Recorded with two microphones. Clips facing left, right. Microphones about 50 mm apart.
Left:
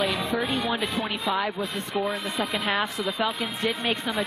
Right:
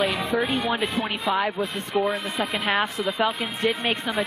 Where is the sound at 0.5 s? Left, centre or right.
Right.